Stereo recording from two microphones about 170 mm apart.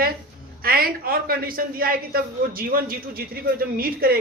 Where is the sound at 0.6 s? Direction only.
60° right (ahead or behind).